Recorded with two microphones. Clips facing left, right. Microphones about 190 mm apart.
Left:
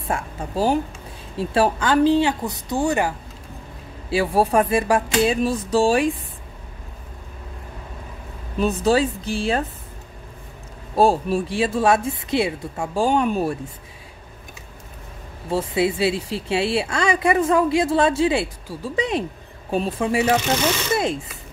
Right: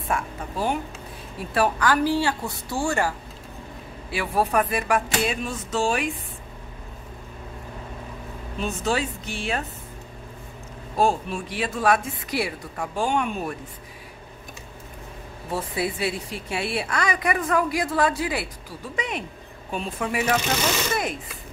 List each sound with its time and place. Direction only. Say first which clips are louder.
0.1 s speech: left 2 dB; 30° left (ahead or behind)
4.1 s speech: left 5 dB; 30° left (ahead or behind)
8.5 s speech: left 7 dB; 35° left (ahead or behind)
11.0 s speech: left 5 dB; 35° left (ahead or behind)
15.5 s speech: left 6 dB; 25° left (ahead or behind)